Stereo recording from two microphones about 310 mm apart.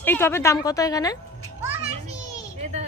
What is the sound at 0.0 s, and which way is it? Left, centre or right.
A woman's voice, centre.